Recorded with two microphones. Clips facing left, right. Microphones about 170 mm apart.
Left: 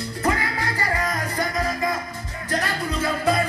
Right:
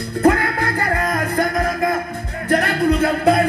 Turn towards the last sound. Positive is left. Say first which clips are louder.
# right 7 dB
turn(degrees=-60)  # may be behind; listen again after turning